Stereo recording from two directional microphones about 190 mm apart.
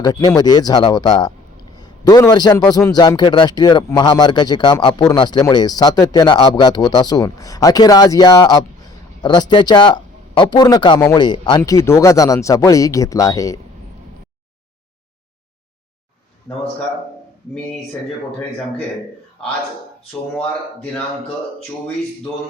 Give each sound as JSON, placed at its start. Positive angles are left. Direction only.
{"t": 0.0, "sound": "a man's voice", "side_deg": 20}
{"t": 16.5, "sound": "speech", "side_deg": 15}